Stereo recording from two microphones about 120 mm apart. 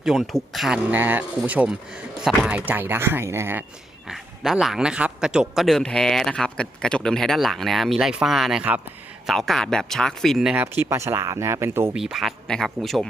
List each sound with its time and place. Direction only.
0.0 s a man's voice: centre (ahead or behind)
0.9 s speech: 15° right (ahead or behind)
4.0 s a man's voice: 5° right (ahead or behind)
10.8 s speech: 25° right (ahead or behind)
11.9 s a man's voice: 5° right (ahead or behind)